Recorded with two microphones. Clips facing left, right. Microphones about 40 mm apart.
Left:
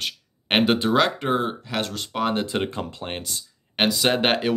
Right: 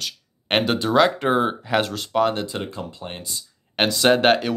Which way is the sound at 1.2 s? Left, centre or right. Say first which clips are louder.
Right 4 dB; centre.